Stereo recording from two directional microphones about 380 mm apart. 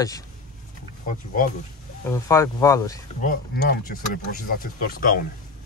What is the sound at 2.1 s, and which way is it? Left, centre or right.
Speech, centre.